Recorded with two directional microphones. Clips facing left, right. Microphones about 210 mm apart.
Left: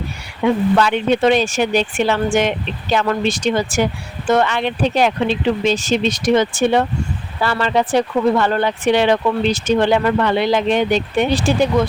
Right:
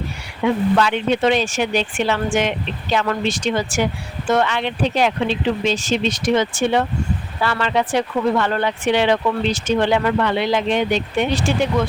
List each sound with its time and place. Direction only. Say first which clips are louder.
0.8 s speech: left 2 dB; 45° left (ahead or behind)